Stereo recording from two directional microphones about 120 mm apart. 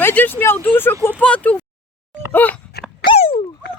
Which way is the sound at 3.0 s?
50° left (ahead or behind).